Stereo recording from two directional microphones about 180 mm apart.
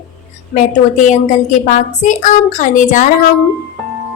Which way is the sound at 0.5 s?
45° left (ahead or behind).